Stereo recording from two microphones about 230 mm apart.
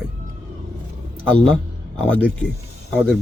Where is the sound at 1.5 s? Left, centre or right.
Centre.